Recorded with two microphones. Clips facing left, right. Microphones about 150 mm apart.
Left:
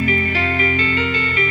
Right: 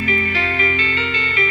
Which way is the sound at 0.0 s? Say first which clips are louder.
Left 2 dB; 45° left (ahead or behind).